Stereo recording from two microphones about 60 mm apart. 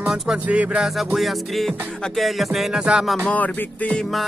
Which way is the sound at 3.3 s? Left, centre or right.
Left.